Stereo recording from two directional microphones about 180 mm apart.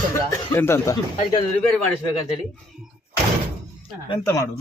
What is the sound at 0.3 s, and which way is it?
Speech, 15° left (ahead or behind).